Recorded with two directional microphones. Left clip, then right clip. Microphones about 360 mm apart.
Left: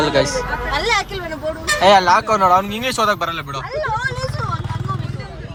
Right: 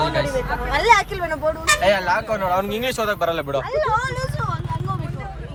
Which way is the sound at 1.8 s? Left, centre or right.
Centre.